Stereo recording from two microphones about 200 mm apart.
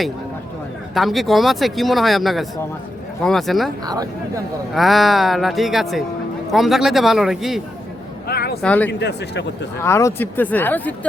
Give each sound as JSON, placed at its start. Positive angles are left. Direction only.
{"t": 0.9, "sound": "speech", "side_deg": 0}
{"t": 4.7, "sound": "speech", "side_deg": 0}
{"t": 8.3, "sound": "a sound", "side_deg": 50}
{"t": 8.6, "sound": "speech", "side_deg": 5}
{"t": 8.9, "sound": "speech", "side_deg": 55}
{"t": 9.8, "sound": "speech", "side_deg": 10}